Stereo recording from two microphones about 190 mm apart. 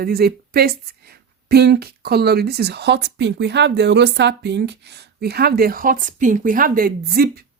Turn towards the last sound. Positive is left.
turn(degrees=-50)  # may be behind; listen again after turning